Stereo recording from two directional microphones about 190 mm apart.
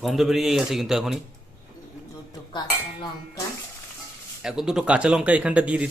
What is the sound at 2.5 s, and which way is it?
Cutlery, 20° left (ahead or behind).